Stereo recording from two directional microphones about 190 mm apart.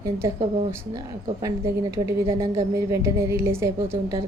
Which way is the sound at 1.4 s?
15° right (ahead or behind).